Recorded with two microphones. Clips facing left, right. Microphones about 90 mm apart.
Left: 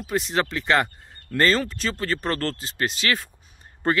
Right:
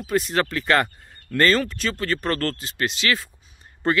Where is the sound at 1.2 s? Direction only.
25° left (ahead or behind).